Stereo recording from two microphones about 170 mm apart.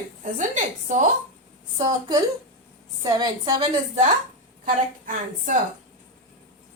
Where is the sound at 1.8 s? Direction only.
20° right (ahead or behind).